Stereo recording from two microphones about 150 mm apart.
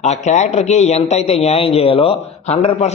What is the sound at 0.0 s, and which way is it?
A man's voice, 50° left (ahead or behind).